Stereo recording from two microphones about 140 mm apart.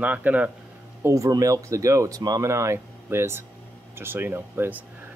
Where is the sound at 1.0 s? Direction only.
20° right (ahead or behind).